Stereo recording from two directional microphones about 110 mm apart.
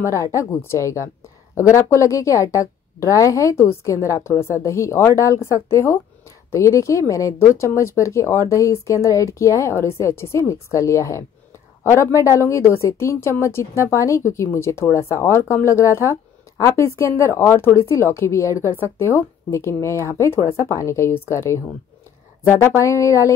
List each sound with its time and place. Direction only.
0.0 s speech: 30° left (ahead or behind)